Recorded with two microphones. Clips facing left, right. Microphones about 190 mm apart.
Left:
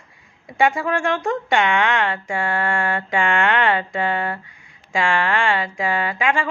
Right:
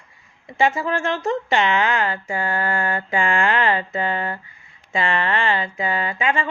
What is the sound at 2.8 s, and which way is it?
Mantra, 80° left.